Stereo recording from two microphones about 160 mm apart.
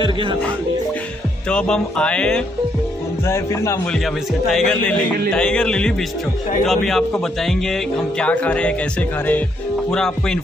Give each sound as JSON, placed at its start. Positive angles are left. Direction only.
{"t": 0.0, "sound": "music", "side_deg": -30}
{"t": 1.5, "sound": "speech", "side_deg": 5}
{"t": 3.3, "sound": "speech", "side_deg": 15}
{"t": 3.9, "sound": "speech", "side_deg": 0}
{"t": 9.8, "sound": "speech", "side_deg": 5}